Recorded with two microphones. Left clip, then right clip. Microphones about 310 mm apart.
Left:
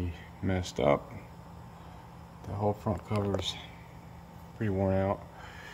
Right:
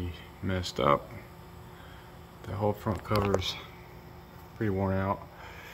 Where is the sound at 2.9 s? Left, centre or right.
Centre.